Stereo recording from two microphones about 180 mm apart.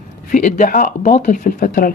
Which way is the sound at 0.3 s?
45° left (ahead or behind).